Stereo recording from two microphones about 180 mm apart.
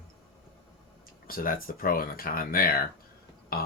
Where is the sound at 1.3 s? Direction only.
50° left (ahead or behind).